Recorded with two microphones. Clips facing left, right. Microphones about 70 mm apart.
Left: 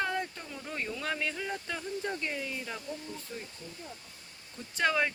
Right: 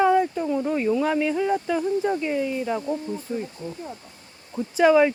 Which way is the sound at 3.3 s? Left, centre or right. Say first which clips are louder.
Right 14 dB; right.